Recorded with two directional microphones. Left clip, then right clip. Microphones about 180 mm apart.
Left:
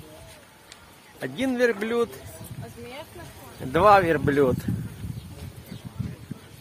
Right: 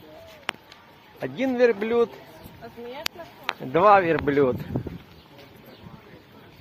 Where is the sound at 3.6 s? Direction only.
5° left (ahead or behind).